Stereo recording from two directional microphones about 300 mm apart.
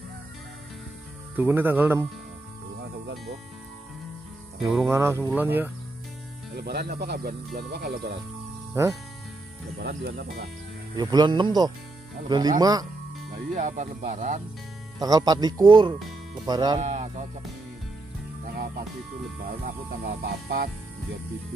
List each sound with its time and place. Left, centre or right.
1.3 s speech: centre
4.6 s speech: centre
6.5 s music: right
8.8 s speech: centre
9.8 s music: right
11.0 s speech: centre
13.6 s speech: right
15.0 s speech: centre
18.4 s music: right